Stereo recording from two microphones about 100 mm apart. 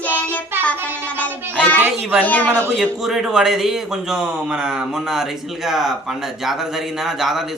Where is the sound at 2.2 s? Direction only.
15° left (ahead or behind).